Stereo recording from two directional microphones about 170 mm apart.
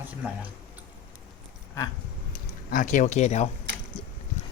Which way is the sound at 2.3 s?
50° left (ahead or behind).